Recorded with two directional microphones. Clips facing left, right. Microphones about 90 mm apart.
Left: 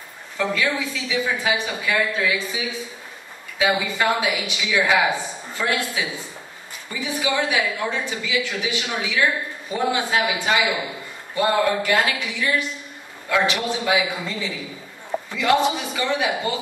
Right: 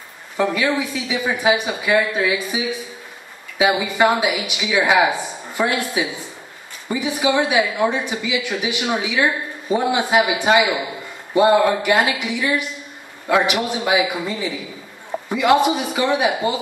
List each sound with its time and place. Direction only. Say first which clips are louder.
0.4 s a woman's voice: right 4 dB; 15° right (ahead or behind)